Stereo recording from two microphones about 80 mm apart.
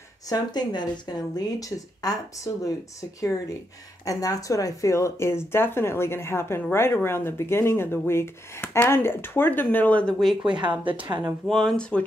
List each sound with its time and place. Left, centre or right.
0.3 s speech: left; by 10.1 s centre
10.9 s speech: right
11.4 s speech: centre